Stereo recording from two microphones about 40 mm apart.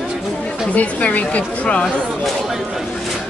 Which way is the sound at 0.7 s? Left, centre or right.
Left.